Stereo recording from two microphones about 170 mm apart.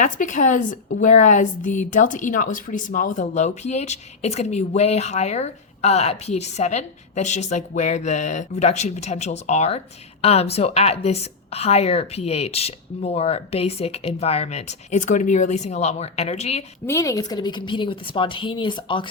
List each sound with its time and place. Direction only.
0.0 s a woman's voice: 45° left (ahead or behind)
16.8 s a woman's voice: 20° left (ahead or behind)